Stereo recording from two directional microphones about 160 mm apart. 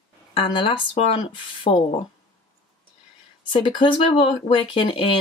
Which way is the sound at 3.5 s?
30° left (ahead or behind).